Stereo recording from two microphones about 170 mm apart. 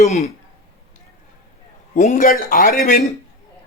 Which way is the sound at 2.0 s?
50° left (ahead or behind).